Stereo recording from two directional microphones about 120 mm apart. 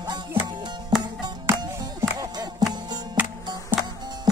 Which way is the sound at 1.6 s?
30° right (ahead or behind).